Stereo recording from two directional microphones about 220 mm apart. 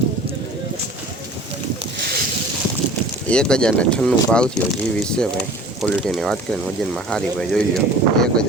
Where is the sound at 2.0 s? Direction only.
45° right (ahead or behind).